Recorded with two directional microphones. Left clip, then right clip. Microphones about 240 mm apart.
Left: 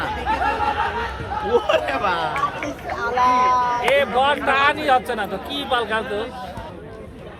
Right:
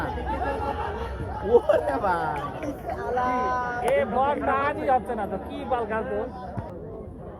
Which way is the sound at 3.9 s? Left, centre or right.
Left.